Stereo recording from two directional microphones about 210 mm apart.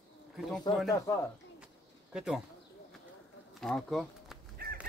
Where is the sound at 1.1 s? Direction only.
15° left (ahead or behind).